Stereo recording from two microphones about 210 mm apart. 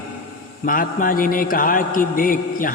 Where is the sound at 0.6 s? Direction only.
40° left (ahead or behind).